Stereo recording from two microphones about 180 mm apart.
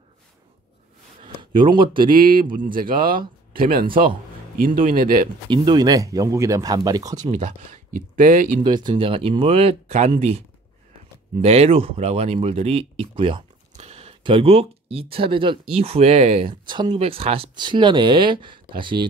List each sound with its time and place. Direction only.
1.2 s a sound: 30° right (ahead or behind)
2.0 s speech: 50° right (ahead or behind)
5.5 s speech: 25° right (ahead or behind)
7.2 s speech: 40° right (ahead or behind)
8.6 s speech: 25° right (ahead or behind)